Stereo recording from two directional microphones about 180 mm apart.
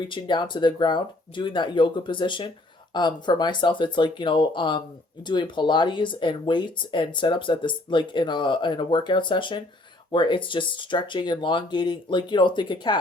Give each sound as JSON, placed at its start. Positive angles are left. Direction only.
{"t": 0.1, "sound": "speech", "side_deg": 25}